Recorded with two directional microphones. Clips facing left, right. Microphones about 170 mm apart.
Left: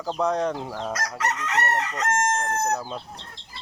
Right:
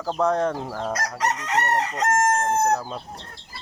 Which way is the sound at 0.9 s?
35° right (ahead or behind).